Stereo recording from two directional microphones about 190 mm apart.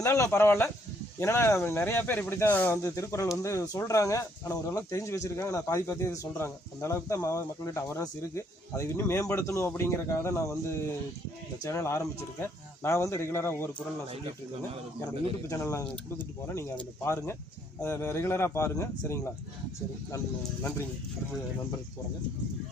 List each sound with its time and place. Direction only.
0.0 s speech: 15° left (ahead or behind)
14.1 s speech: 30° right (ahead or behind)
15.4 s speech: 15° left (ahead or behind)